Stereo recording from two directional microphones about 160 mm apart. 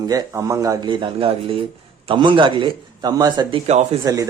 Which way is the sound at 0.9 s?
35° right (ahead or behind).